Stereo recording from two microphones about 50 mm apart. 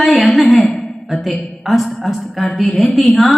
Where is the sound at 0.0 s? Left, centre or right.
Centre.